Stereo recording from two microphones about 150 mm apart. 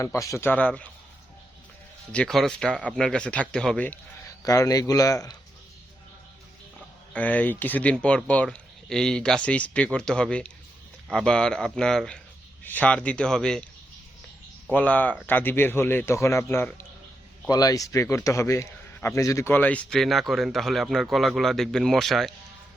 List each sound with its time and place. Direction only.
0.0 s speech: 20° left (ahead or behind)
2.1 s a man's voice: centre (ahead or behind)
4.4 s speech: 25° left (ahead or behind)
7.1 s a man's voice: 10° left (ahead or behind)
14.7 s a man's voice: 10° left (ahead or behind)